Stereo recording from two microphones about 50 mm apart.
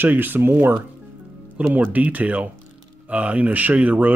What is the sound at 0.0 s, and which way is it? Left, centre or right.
Speech, right.